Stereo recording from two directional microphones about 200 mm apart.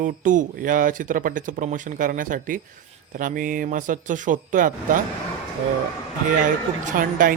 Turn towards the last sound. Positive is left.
turn(degrees=-40)  # may be behind; listen again after turning